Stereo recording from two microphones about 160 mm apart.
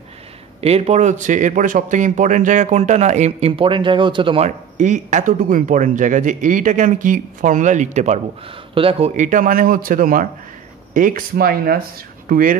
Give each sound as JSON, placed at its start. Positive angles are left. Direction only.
{"t": 0.6, "sound": "a man's voice", "side_deg": -40}
{"t": 4.5, "sound": "a man's voice", "side_deg": -50}